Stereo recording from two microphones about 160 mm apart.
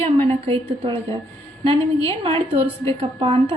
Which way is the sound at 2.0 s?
35° right (ahead or behind).